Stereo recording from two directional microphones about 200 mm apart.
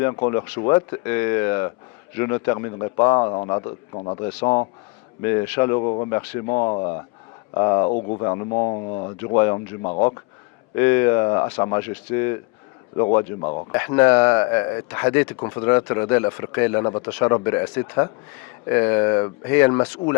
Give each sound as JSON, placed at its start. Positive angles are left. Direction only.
{"t": 0.0, "sound": "a man's voice", "side_deg": 20}
{"t": 5.2, "sound": "speech", "side_deg": 10}
{"t": 5.8, "sound": "a man's voice", "side_deg": 25}
{"t": 7.9, "sound": "a man's voice", "side_deg": 35}
{"t": 10.8, "sound": "speech", "side_deg": 10}
{"t": 11.4, "sound": "a man's voice", "side_deg": 30}
{"t": 11.7, "sound": "a man's voice", "side_deg": 15}
{"t": 13.7, "sound": "speech", "side_deg": 15}